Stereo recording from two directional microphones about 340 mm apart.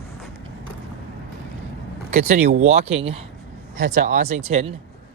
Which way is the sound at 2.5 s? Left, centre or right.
Centre.